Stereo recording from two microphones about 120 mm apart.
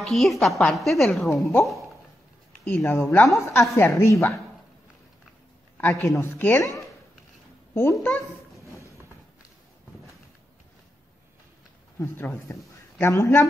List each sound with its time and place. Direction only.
0.0 s a woman's voice: centre (ahead or behind)
1.3 s a woman's voice: 25° left (ahead or behind)
6.0 s a woman's voice: 20° left (ahead or behind)
7.7 s a woman's voice: 20° left (ahead or behind)
12.0 s a woman's voice: 25° left (ahead or behind)